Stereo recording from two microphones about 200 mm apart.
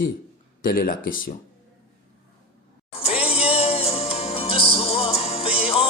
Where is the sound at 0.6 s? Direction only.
45° left (ahead or behind).